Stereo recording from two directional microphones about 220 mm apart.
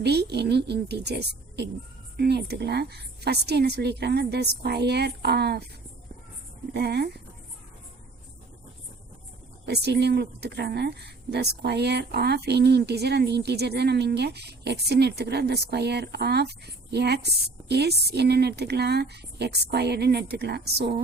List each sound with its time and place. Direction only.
0.0 s speech: 50° right (ahead or behind)
6.7 s speech: 50° right (ahead or behind)
9.6 s speech: 50° right (ahead or behind)